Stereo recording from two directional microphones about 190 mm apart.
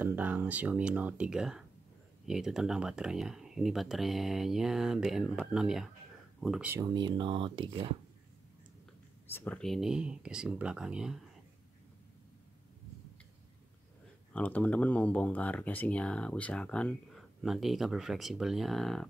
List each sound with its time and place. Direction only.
0.0 s speech: 10° right (ahead or behind)
6.8 s speech: 25° right (ahead or behind)
9.3 s speech: 10° left (ahead or behind)
14.3 s speech: 5° left (ahead or behind)